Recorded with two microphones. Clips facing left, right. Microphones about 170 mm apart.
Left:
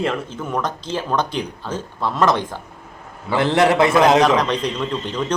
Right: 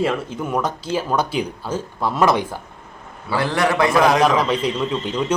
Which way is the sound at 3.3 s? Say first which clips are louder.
Left 4 dB; 20° left (ahead or behind).